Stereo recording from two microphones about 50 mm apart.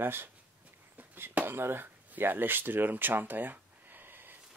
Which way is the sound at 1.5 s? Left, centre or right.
Right.